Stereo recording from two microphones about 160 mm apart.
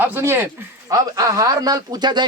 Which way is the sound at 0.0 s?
15° right (ahead or behind).